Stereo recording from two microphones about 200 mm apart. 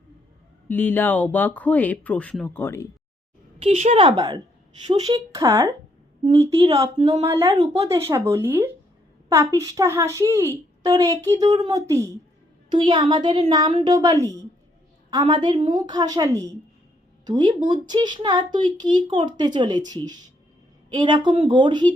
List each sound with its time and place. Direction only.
0.7 s speech: 10° left (ahead or behind)
3.6 s a woman's voice: 30° right (ahead or behind)
8.1 s a woman's voice: 15° right (ahead or behind)